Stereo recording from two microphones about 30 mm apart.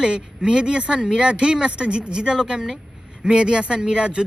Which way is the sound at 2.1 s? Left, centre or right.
Right.